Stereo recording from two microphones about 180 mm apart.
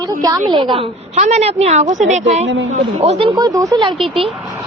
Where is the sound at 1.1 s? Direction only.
40° right (ahead or behind).